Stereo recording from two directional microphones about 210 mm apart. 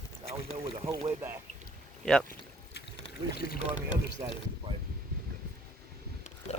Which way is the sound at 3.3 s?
45° left (ahead or behind).